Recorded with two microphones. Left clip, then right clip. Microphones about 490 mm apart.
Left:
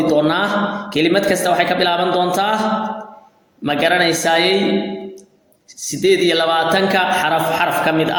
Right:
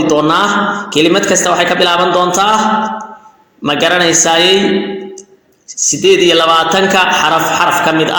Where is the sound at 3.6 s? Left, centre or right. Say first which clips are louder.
Right 4 dB; left.